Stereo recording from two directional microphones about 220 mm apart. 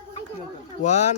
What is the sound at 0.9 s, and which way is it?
Speech, 90° left.